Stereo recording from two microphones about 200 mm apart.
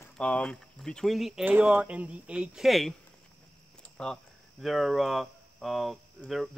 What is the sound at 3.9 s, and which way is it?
Speech, 5° left (ahead or behind).